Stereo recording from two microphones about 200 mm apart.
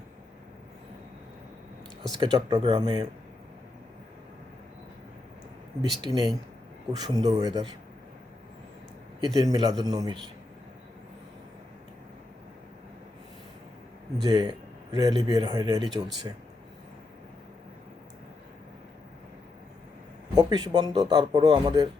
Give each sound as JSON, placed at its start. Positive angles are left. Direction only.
{"t": 2.1, "sound": "a man's voice", "side_deg": -20}
{"t": 6.0, "sound": "a man's voice", "side_deg": -20}
{"t": 9.2, "sound": "a man's voice", "side_deg": -20}
{"t": 14.3, "sound": "a man's voice", "side_deg": -20}
{"t": 20.3, "sound": "a man's voice", "side_deg": -20}